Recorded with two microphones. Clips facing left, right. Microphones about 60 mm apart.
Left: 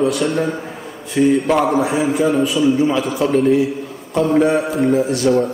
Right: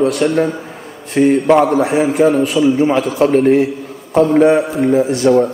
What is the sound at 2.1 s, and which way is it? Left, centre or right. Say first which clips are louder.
A man's voice: right 4 dB; right.